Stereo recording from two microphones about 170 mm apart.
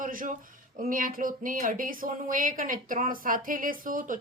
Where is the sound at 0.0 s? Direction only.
55° right (ahead or behind).